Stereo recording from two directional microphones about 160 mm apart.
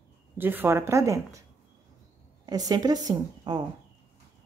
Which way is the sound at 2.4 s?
25° right (ahead or behind).